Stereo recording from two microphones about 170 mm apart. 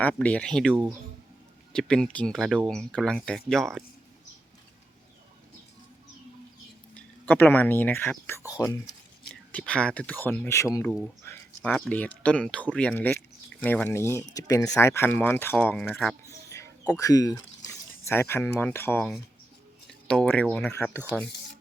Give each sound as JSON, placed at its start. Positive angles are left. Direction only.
{"t": 0.0, "sound": "speech", "side_deg": 10}
{"t": 6.9, "sound": "speech", "side_deg": 10}
{"t": 9.3, "sound": "speech", "side_deg": 5}
{"t": 10.8, "sound": "speech", "side_deg": 0}
{"t": 11.2, "sound": "a sound", "side_deg": 15}
{"t": 11.7, "sound": "speech", "side_deg": 10}
{"t": 16.3, "sound": "a sound", "side_deg": 15}
{"t": 20.1, "sound": "speech", "side_deg": 5}